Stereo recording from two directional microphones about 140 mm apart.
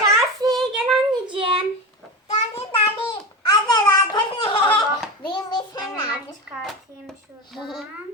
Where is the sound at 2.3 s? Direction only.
45° left (ahead or behind).